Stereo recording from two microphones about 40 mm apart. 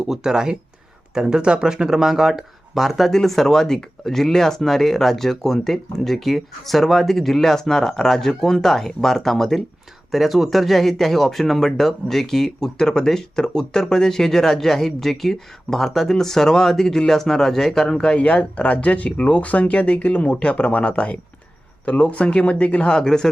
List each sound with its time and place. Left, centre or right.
0.1 s speech: centre
3.1 s speech: centre; by 22.9 s left
22.9 s speech: centre